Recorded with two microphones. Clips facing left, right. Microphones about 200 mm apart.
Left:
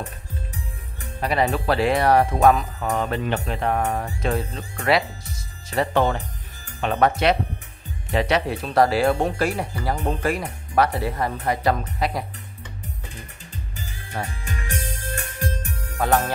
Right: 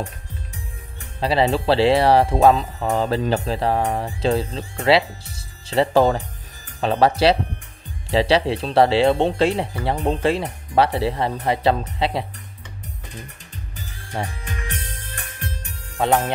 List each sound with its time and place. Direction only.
1.2 s speech: 30° right (ahead or behind)
14.2 s speech: 25° right (ahead or behind)
16.0 s speech: 25° right (ahead or behind)